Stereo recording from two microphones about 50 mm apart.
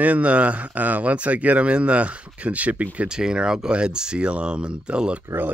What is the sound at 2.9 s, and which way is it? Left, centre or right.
A man's voice, centre.